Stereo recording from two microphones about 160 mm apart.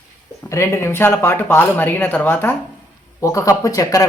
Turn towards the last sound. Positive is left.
turn(degrees=20)  # may be behind; listen again after turning